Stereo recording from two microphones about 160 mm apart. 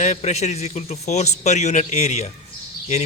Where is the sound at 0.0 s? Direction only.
45° left (ahead or behind).